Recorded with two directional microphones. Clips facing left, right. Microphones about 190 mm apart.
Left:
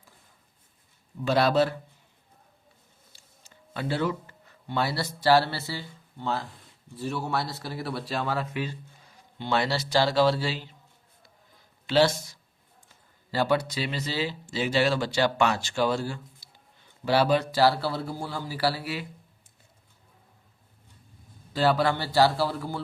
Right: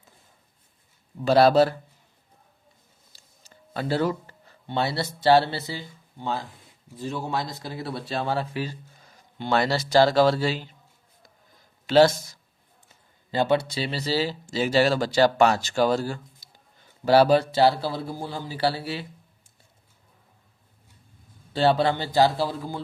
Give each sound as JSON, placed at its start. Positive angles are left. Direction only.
{"t": 1.2, "sound": "speech", "side_deg": -35}
{"t": 3.1, "sound": "speech", "side_deg": -40}
{"t": 9.4, "sound": "speech", "side_deg": -45}
{"t": 11.9, "sound": "speech", "side_deg": -45}
{"t": 13.3, "sound": "speech", "side_deg": -20}
{"t": 17.5, "sound": "speech", "side_deg": -20}
{"t": 21.5, "sound": "speech", "side_deg": -25}